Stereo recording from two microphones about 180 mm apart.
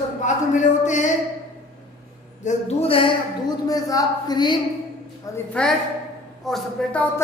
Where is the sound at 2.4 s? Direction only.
40° left (ahead or behind).